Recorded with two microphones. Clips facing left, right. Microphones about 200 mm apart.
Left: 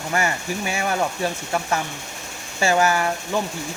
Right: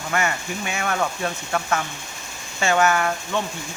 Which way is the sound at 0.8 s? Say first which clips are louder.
Left 1 dB; 10° left (ahead or behind).